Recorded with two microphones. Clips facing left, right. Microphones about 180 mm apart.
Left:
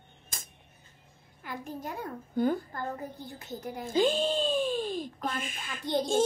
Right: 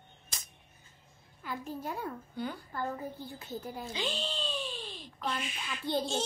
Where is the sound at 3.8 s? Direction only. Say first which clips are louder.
Left 14 dB; 50° left (ahead or behind).